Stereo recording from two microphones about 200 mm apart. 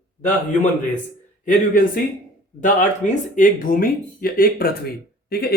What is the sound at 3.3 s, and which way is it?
Speech, 45° left (ahead or behind).